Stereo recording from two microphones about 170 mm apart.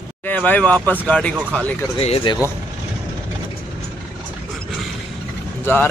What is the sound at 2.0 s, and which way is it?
Speech, 35° left (ahead or behind).